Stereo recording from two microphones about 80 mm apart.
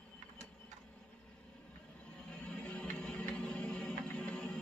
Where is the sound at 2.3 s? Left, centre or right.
Centre.